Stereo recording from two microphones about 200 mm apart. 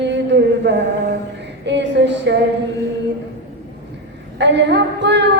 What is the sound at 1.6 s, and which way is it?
Speech, 60° right (ahead or behind).